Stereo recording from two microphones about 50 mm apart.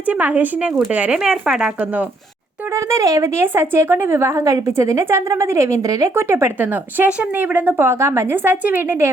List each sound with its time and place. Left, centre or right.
0.0 s a woman's voice: right
1.2 s speech: centre
1.8 s a woman's voice: right
2.7 s speech: right
4.2 s a woman's voice: right
5.0 s a woman's voice: right
6.1 s speech: right
6.6 s a woman's voice: right
7.1 s a woman's voice: right
7.8 s speech: right
8.4 s a woman's voice: right